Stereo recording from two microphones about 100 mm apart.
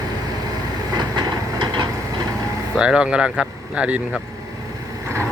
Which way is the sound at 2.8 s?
10° right (ahead or behind).